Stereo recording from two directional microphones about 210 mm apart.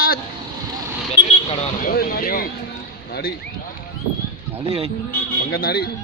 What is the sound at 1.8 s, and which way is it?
Speech, 45° left (ahead or behind).